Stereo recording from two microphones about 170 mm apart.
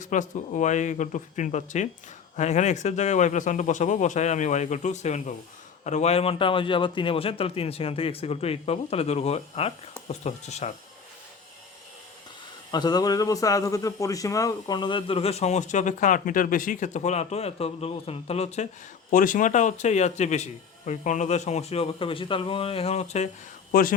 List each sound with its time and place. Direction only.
0.0 s a man's voice: 45° left (ahead or behind)
12.7 s speech: 25° left (ahead or behind); by 18.7 s 40° left (ahead or behind)
19.1 s speech: 50° left (ahead or behind)